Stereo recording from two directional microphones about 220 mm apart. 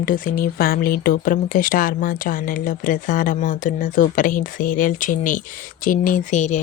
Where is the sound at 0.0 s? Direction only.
40° left (ahead or behind).